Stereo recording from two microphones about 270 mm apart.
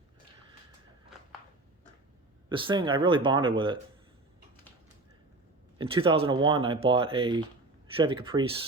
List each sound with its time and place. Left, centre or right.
2.5 s speech: centre
5.7 s speech: centre